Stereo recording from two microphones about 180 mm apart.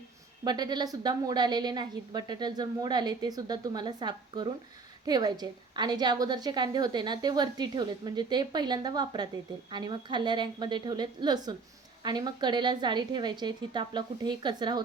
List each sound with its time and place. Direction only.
0.4 s a woman's voice: 25° right (ahead or behind)